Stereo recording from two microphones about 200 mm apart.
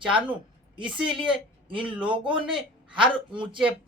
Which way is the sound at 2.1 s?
5° right (ahead or behind).